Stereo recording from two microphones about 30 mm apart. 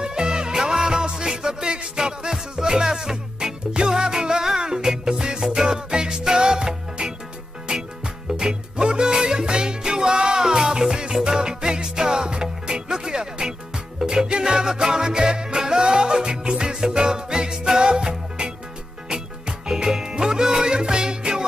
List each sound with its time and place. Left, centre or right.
0.0 s music: right